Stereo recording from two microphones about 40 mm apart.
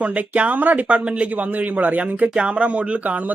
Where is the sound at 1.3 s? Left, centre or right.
Right.